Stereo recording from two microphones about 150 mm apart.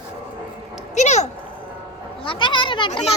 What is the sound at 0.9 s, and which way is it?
Speech, 50° left (ahead or behind).